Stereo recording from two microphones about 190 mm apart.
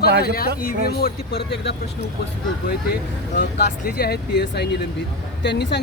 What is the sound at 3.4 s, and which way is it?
A man's voice, 60° left (ahead or behind).